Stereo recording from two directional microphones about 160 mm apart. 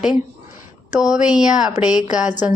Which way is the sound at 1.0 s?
5° right (ahead or behind).